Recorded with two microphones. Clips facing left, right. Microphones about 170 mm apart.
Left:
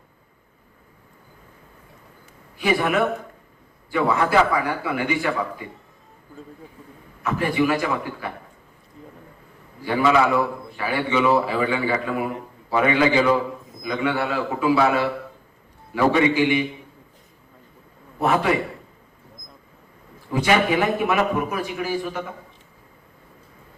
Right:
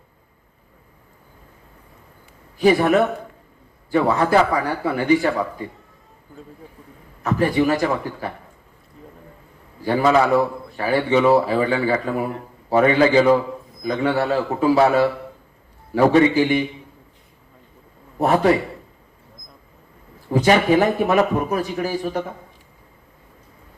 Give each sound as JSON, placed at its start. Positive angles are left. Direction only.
{"t": 2.6, "sound": "a man's voice", "side_deg": -35}
{"t": 3.9, "sound": "a man's voice", "side_deg": -40}
{"t": 7.2, "sound": "a man's voice", "side_deg": -40}
{"t": 9.8, "sound": "a man's voice", "side_deg": -40}
{"t": 16.3, "sound": "a man's voice", "side_deg": -35}
{"t": 18.2, "sound": "a man's voice", "side_deg": -40}
{"t": 20.3, "sound": "a man's voice", "side_deg": -40}